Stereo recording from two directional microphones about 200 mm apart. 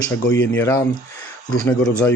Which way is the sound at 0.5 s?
15° left (ahead or behind).